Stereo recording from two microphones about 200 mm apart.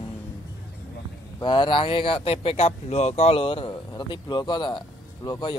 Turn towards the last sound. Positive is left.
turn(degrees=20)  # may be behind; listen again after turning